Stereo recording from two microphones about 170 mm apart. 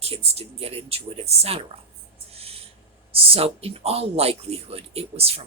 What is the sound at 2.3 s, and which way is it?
Owl, 35° right (ahead or behind).